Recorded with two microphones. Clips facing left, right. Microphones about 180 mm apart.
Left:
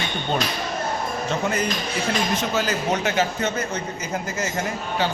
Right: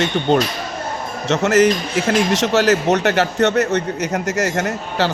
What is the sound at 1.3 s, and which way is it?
A man's voice, 80° right.